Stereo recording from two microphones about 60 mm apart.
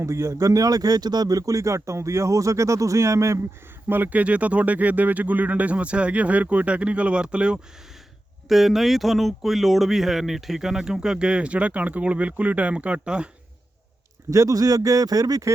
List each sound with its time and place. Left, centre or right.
0.0 s speech: right
3.8 s speech: right; by 7.6 s centre
8.4 s speech: centre
14.3 s speech: right